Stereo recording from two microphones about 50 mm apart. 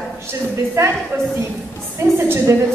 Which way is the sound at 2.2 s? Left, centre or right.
Right.